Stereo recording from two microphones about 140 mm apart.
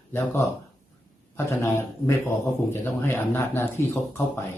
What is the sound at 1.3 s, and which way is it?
A man's voice, 20° left (ahead or behind).